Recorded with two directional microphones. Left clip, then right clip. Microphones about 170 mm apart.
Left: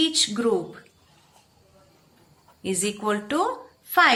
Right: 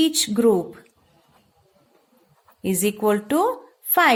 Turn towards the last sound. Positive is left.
turn(degrees=-60)  # may be behind; listen again after turning